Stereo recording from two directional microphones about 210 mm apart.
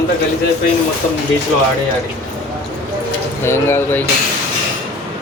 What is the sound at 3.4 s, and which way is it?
Speech, 10° left (ahead or behind).